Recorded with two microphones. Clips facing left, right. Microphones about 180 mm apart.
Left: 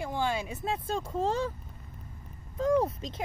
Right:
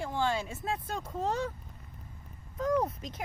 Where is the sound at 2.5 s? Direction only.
25° left (ahead or behind).